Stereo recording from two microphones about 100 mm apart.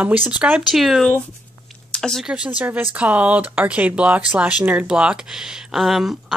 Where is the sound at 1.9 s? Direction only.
5° left (ahead or behind).